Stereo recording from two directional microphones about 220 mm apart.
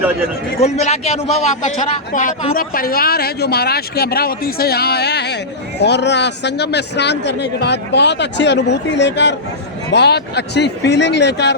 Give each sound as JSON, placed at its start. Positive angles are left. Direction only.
{"t": 0.6, "sound": "a man's voice", "side_deg": 30}